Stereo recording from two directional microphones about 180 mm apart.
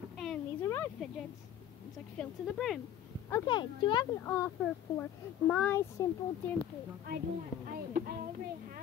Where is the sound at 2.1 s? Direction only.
Centre (ahead or behind).